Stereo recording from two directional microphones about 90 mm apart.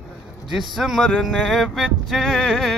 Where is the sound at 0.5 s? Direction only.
5° right (ahead or behind).